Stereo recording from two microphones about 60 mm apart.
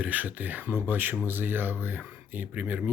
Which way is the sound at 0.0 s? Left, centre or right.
Right.